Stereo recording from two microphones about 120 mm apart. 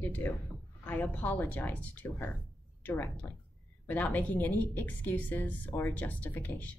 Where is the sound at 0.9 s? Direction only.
Centre (ahead or behind).